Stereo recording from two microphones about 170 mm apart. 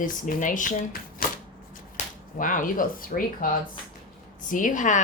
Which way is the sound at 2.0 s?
40° left (ahead or behind).